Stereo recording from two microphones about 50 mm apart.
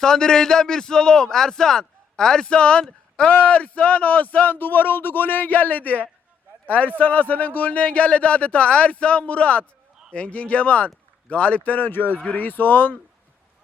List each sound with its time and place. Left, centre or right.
0.0 s a man's voice: centre; by 13.0 s left